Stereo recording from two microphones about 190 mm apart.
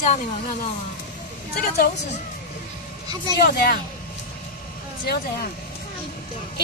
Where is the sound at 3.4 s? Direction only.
55° left (ahead or behind).